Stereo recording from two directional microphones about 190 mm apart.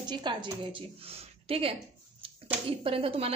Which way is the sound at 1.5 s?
30° right (ahead or behind).